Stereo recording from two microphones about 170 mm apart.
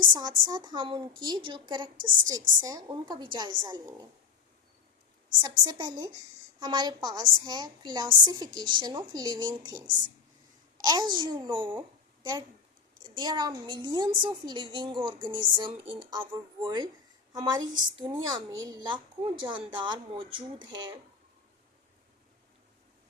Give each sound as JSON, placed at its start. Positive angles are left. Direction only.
{"t": 0.1, "sound": "speech", "side_deg": -25}
{"t": 5.4, "sound": "speech", "side_deg": -25}
{"t": 10.8, "sound": "speech", "side_deg": -25}
{"t": 13.1, "sound": "speech", "side_deg": -25}